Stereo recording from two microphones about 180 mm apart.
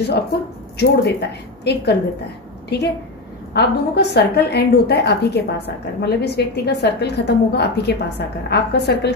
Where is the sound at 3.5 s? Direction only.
65° left (ahead or behind).